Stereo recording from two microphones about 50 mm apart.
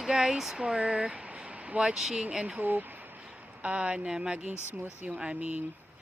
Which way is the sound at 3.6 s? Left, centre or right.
Right.